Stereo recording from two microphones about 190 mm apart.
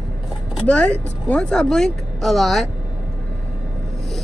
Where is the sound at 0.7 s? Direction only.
5° left (ahead or behind).